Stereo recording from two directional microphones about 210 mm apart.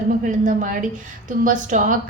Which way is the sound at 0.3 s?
40° right (ahead or behind).